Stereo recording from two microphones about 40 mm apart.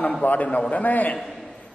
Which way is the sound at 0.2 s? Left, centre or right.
Left.